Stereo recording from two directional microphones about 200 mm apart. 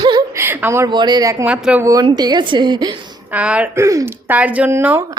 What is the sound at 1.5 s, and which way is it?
Speech, 5° right (ahead or behind).